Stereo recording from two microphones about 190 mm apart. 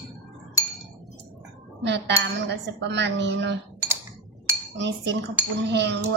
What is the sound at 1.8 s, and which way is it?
Cutlery, 65° right (ahead or behind).